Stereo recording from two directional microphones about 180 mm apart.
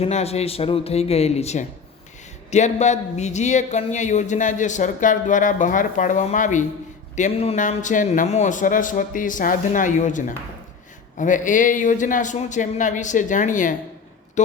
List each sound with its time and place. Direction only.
0.0 s speech: 35° left (ahead or behind)